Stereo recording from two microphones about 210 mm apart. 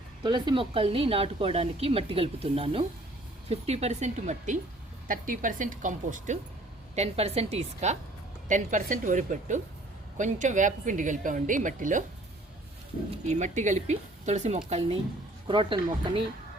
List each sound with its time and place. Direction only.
0.2 s a woman's voice: 20° right (ahead or behind); by 12.0 s 40° right (ahead or behind)
13.2 s a woman's voice: 35° right (ahead or behind)